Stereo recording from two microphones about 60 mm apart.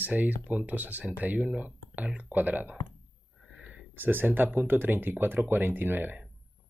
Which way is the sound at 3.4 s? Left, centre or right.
Centre.